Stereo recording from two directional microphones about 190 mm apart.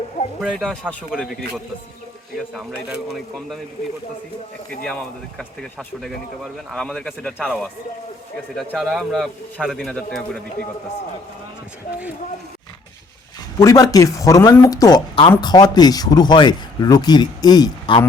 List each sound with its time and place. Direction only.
0.4 s speech: 5° left (ahead or behind)
2.6 s speech: centre (ahead or behind)
5.4 s speech: centre (ahead or behind)
13.6 s speech: 15° left (ahead or behind)